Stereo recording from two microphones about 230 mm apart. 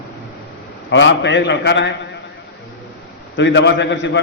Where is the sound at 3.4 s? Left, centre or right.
Left.